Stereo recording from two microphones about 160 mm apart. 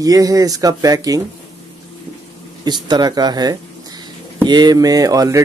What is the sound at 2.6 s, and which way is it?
Speech, 25° right (ahead or behind).